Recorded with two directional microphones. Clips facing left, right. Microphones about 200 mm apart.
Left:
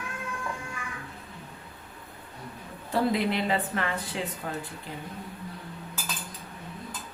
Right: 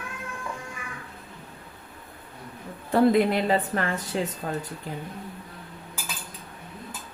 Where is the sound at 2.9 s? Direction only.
50° right (ahead or behind).